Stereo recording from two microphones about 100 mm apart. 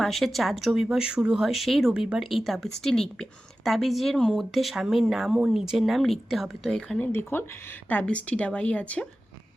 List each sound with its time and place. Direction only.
0.0 s speech: centre (ahead or behind)
7.0 s a woman's voice: 25° left (ahead or behind)